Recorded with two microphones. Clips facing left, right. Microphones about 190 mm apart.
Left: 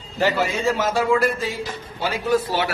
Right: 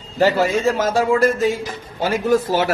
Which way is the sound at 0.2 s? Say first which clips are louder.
Right 5 dB; 40° right (ahead or behind).